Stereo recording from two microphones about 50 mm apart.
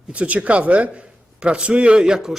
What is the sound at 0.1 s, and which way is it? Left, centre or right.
A man's voice, right.